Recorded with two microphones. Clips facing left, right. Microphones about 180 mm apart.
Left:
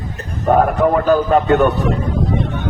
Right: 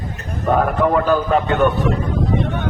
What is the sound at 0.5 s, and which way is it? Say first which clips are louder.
A man's voice: left 2 dB; 45° left (ahead or behind).